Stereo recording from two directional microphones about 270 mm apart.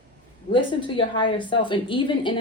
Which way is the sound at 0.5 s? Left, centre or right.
Centre.